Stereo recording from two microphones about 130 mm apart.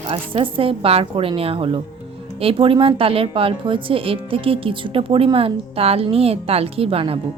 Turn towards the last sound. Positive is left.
turn(degrees=-45)  # may be behind; listen again after turning